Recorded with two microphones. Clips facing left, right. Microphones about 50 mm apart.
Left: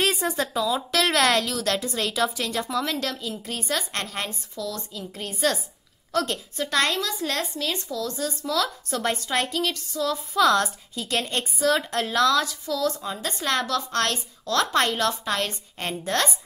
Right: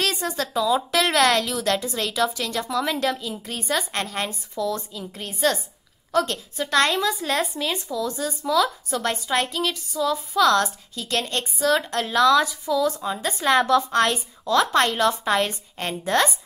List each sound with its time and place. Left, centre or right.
0.0 s a sound: centre
0.5 s a woman's voice: centre
2.8 s a woman's voice: centre
4.6 s speech: right
4.9 s a woman's voice: centre
12.4 s a woman's voice: centre